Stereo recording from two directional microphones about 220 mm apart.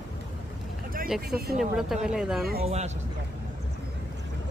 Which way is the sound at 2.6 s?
30° right (ahead or behind).